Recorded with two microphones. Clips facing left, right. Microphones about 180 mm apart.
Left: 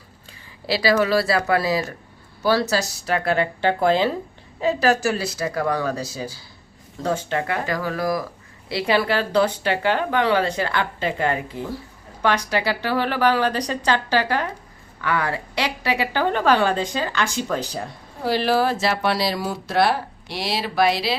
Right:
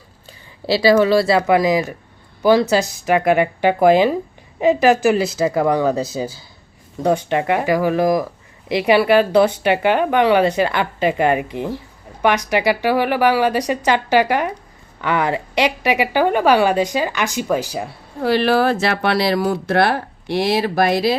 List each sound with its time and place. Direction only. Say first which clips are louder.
0.3 s speech: right 6 dB; 25° right (ahead or behind); by 17.8 s 10° right (ahead or behind)
18.2 s speech: right 4 dB; 65° right (ahead or behind)